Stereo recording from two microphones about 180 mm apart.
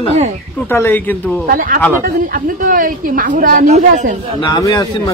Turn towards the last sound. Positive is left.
turn(degrees=20)  # may be behind; listen again after turning